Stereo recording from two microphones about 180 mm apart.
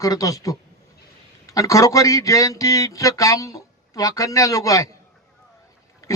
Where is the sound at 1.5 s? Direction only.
20° left (ahead or behind).